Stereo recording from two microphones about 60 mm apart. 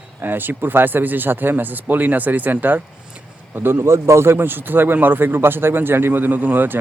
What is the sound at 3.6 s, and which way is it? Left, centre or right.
Speech, right.